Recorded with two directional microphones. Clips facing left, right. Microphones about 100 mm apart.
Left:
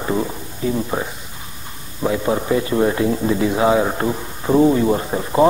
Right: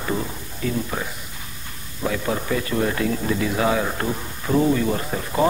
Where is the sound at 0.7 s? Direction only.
25° left (ahead or behind).